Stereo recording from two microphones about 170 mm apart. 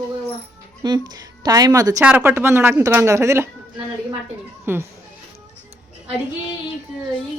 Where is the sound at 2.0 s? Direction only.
10° right (ahead or behind).